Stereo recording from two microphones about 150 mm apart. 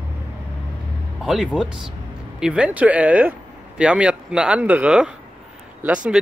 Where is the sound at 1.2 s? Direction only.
5° right (ahead or behind).